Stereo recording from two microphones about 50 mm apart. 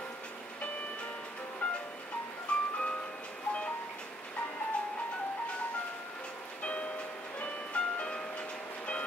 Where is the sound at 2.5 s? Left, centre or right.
Left.